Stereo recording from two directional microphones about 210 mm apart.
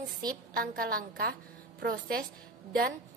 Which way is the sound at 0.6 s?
45° right (ahead or behind).